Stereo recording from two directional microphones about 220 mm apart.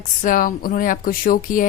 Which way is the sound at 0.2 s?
40° left (ahead or behind).